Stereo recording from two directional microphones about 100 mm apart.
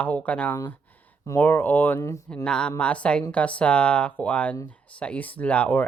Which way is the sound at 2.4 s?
10° left (ahead or behind).